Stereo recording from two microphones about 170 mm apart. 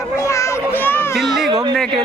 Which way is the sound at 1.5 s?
25° right (ahead or behind).